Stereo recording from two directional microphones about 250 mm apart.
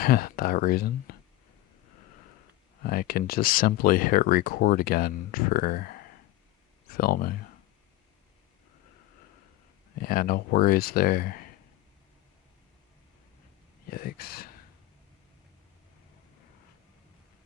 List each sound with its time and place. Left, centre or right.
0.0 s speech: left
2.8 s speech: left
9.9 s speech: left
13.9 s speech: left